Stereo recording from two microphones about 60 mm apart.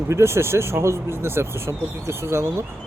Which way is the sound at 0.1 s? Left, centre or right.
Right.